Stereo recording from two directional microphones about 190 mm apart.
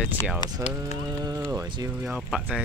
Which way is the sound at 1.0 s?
20° right (ahead or behind).